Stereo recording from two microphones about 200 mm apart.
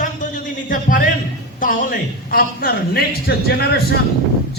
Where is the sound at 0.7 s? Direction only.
40° left (ahead or behind).